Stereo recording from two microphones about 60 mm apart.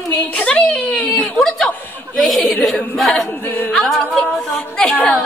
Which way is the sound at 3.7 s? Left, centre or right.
Centre.